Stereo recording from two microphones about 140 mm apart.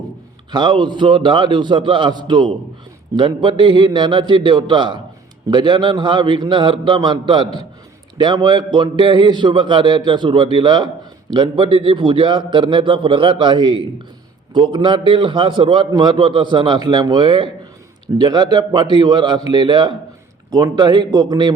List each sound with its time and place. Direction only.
0.5 s a man's voice: 35° right (ahead or behind)